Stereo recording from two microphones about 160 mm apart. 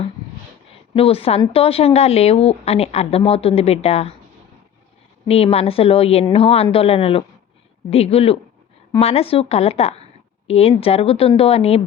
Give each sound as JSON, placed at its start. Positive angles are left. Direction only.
{"t": 0.9, "sound": "a woman's voice", "side_deg": 40}
{"t": 5.3, "sound": "a woman's voice", "side_deg": 40}